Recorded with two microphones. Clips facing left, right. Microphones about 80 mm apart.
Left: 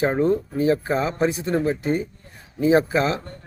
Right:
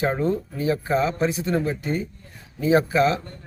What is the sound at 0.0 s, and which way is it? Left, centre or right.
Speech, left.